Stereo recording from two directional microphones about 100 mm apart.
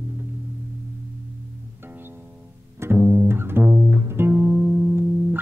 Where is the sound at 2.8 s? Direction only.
25° right (ahead or behind).